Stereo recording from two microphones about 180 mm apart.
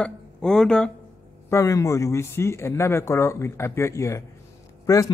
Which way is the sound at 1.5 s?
15° left (ahead or behind).